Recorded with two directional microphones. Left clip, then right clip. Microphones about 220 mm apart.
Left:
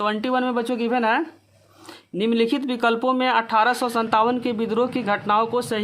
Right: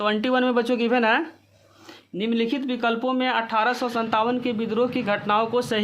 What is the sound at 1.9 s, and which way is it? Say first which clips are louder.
Speech: left 4 dB; 30° left (ahead or behind).